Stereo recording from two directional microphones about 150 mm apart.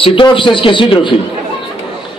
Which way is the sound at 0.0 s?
35° left (ahead or behind).